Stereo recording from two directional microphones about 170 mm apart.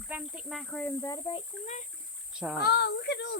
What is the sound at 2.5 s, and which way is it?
Speech, 70° left (ahead or behind).